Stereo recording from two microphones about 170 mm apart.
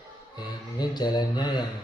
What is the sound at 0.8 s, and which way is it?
Speech, 25° left (ahead or behind).